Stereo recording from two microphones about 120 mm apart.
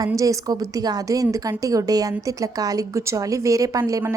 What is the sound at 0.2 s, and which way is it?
A woman's voice, 30° right (ahead or behind).